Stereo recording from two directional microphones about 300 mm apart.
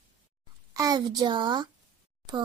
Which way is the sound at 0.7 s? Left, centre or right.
Centre.